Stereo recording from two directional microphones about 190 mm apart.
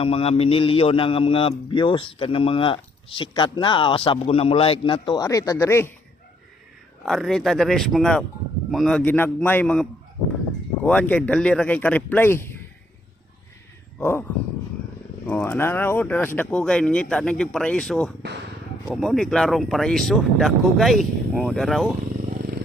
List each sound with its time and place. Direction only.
0.0 s a man's voice: 30° left (ahead or behind); by 5.9 s 10° left (ahead or behind)
7.0 s speech: centre (ahead or behind)
10.8 s speech: 5° left (ahead or behind)
14.0 s speech: 10° left (ahead or behind)
15.3 s speech: 10° left (ahead or behind)